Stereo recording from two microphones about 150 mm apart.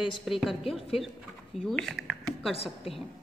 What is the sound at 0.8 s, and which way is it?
Speech, 40° left (ahead or behind).